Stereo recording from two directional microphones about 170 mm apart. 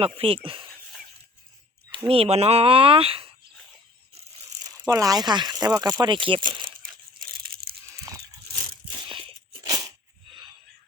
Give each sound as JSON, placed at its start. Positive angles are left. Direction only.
{"t": 0.0, "sound": "speech", "side_deg": -35}
{"t": 2.0, "sound": "speech", "side_deg": -35}
{"t": 4.1, "sound": "crumpling", "side_deg": -35}
{"t": 4.9, "sound": "speech", "side_deg": -20}
{"t": 7.2, "sound": "tearing", "side_deg": -60}
{"t": 8.5, "sound": "crunch", "side_deg": -30}